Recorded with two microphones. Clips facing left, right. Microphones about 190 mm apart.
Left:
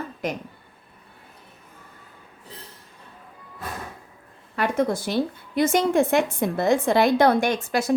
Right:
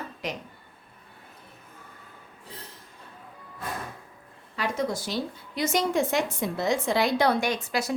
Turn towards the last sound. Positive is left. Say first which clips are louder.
# left 5 dB
turn(degrees=50)  # may be behind; listen again after turning